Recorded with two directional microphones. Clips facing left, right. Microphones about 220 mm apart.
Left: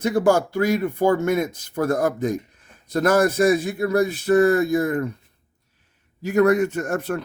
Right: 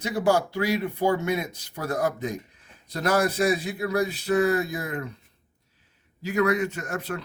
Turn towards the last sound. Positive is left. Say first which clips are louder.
# left 7 dB
turn(degrees=50)  # may be behind; listen again after turning